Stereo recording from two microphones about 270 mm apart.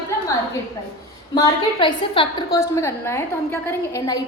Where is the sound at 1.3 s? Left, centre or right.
Centre.